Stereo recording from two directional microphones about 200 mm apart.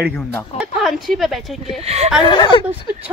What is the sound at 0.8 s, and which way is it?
Speech, centre (ahead or behind).